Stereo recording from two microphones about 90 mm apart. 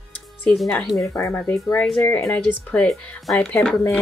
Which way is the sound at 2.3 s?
15° left (ahead or behind).